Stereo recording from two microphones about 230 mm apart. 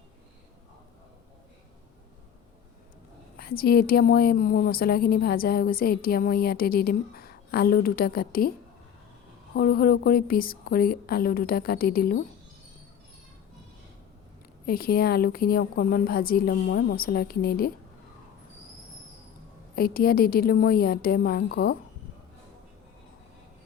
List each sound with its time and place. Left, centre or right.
3.3 s a woman's voice: left
9.6 s a woman's voice: left
14.7 s a woman's voice: left
19.7 s a woman's voice: left